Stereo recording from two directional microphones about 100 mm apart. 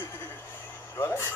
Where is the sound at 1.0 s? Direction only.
25° left (ahead or behind).